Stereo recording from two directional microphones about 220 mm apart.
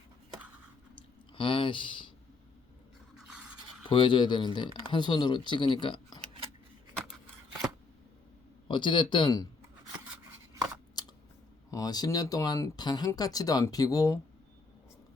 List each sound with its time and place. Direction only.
0.9 s chewing: 25° left (ahead or behind)
3.2 s toothbrush: 5° right (ahead or behind)
3.8 s speech: 20° left (ahead or behind)
8.6 s speech: 20° left (ahead or behind)
11.0 s scissors: 20° left (ahead or behind)
11.7 s speech: 15° left (ahead or behind)